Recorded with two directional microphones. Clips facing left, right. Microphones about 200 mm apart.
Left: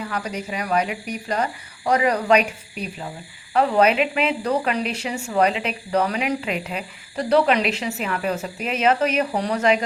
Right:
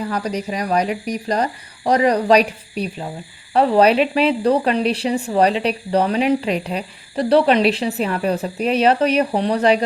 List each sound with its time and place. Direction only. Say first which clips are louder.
0.0 s speech: right 5 dB; 35° right (ahead or behind)